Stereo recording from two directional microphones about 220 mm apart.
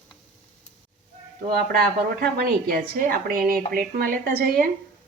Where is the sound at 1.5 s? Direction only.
40° right (ahead or behind).